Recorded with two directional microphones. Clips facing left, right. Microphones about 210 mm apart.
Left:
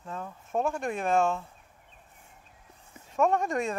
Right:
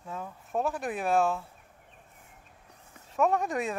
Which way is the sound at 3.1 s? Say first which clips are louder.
Left 1 dB; centre (ahead or behind).